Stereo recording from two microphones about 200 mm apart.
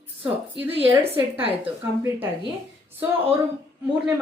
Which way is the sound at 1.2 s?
10° right (ahead or behind).